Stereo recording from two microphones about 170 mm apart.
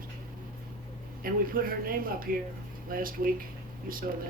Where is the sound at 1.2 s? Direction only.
55° right (ahead or behind).